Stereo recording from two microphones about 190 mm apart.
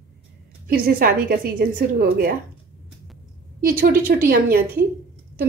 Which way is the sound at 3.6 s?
50° right (ahead or behind).